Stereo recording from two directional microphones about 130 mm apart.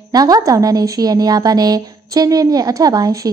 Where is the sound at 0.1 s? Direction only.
30° right (ahead or behind).